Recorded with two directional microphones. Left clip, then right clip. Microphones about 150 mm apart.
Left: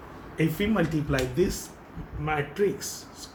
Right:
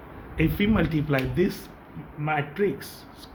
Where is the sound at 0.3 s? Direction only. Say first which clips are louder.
Right 2 dB; 70° right (ahead or behind).